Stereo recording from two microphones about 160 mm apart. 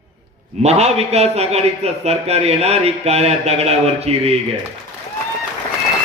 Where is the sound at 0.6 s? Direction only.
40° right (ahead or behind).